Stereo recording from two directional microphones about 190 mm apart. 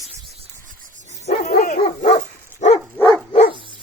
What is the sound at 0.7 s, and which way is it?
Rub, 45° right (ahead or behind).